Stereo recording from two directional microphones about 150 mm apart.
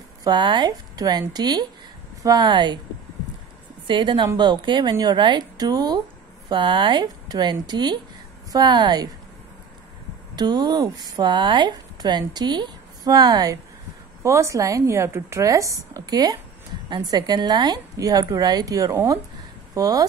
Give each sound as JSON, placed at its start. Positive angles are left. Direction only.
{"t": 0.2, "sound": "speech", "side_deg": -30}
{"t": 3.8, "sound": "speech", "side_deg": -30}
{"t": 10.3, "sound": "speech", "side_deg": -30}